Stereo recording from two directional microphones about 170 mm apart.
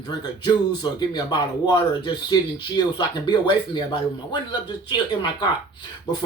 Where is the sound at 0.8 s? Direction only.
25° left (ahead or behind).